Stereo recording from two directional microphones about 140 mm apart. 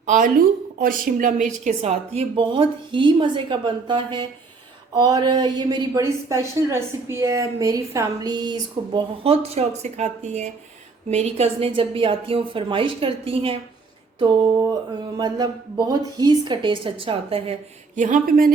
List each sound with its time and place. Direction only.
0.0 s a woman's voice: 65° right (ahead or behind); by 2.4 s 50° right (ahead or behind)
2.4 s a woman's voice: 35° right (ahead or behind)
9.2 s a woman's voice: 45° right (ahead or behind)
14.6 s a woman's voice: 25° right (ahead or behind); by 18.0 s 45° right (ahead or behind)
18.0 s speech: 80° right